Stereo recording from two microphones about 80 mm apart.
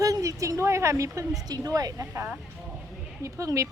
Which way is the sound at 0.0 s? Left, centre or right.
Right.